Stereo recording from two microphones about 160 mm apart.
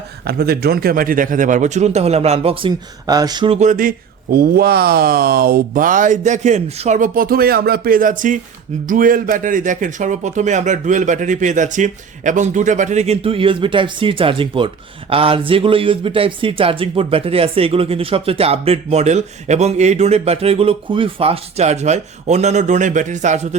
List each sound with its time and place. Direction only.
0.3 s speech: 80° right; by 3.5 s 25° right (ahead or behind)
3.5 s speech: 50° right (ahead or behind)